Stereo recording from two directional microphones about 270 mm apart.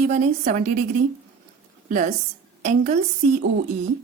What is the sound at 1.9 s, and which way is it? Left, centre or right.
Speech, right.